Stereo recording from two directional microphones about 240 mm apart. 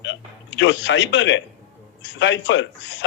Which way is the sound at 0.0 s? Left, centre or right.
Left.